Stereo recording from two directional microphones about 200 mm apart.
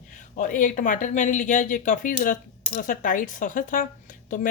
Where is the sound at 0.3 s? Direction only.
40° left (ahead or behind).